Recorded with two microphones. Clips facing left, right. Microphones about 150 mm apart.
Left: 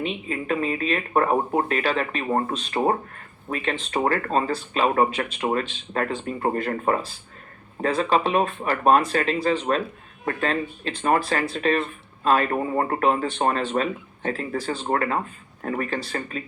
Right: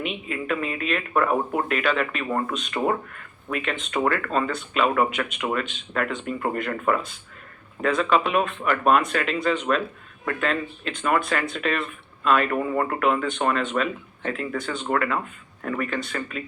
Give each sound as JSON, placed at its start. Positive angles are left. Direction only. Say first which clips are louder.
{"t": 0.0, "sound": "speech", "louder": "left 1 dB", "side_deg": 35}